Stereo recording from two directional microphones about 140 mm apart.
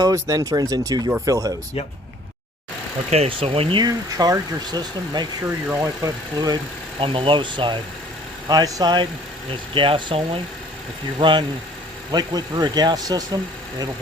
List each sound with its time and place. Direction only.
0.0 s speech: 25° right (ahead or behind)
3.1 s speech: 45° right (ahead or behind)
5.6 s speech: 20° right (ahead or behind)
7.0 s speech: 40° right (ahead or behind)